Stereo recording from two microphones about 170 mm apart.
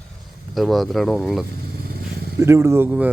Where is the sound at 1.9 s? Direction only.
65° right (ahead or behind).